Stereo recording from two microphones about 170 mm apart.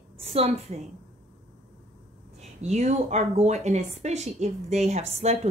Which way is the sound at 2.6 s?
40° right (ahead or behind).